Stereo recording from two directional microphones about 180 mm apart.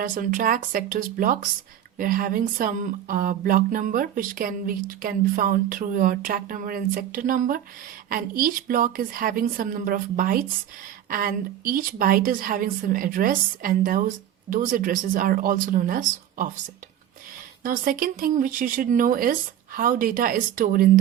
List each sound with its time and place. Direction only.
0.0 s speech: 50° right (ahead or behind)
17.6 s speech: 50° right (ahead or behind)